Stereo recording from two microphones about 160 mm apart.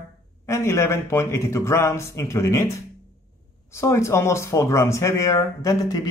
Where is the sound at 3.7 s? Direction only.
20° left (ahead or behind).